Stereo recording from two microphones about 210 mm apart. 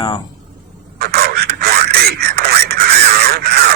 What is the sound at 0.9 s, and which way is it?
Radio, 50° right (ahead or behind).